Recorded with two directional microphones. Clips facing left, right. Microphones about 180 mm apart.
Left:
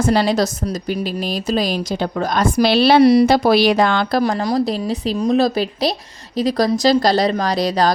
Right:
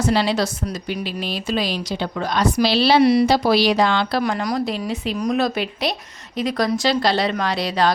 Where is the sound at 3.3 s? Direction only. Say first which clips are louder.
Left 3 dB; 50° left (ahead or behind).